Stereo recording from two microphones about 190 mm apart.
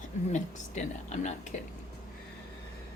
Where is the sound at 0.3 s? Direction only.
40° left (ahead or behind).